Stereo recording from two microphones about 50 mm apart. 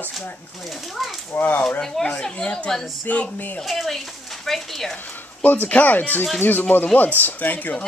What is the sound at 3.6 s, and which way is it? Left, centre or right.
Speech, centre.